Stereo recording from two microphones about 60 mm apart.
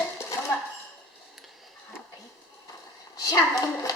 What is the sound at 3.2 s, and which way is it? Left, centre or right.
Speech, left.